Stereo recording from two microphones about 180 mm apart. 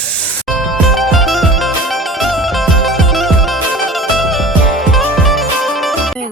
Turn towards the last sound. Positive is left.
turn(degrees=0)  # may be behind; listen again after turning